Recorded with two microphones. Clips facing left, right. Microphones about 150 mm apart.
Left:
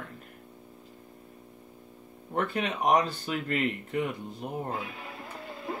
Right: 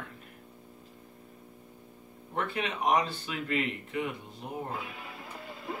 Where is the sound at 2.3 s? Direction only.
45° left (ahead or behind).